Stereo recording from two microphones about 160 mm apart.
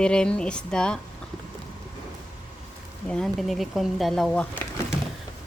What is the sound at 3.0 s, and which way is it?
Speech, 5° left (ahead or behind).